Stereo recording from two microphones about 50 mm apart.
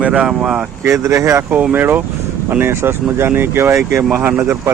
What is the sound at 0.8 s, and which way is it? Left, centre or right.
Speech, right.